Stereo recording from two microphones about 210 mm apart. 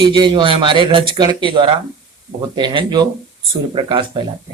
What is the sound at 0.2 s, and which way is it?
Speech, 20° right (ahead or behind).